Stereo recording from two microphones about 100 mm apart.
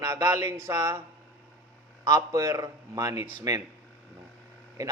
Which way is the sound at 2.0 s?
35° right (ahead or behind).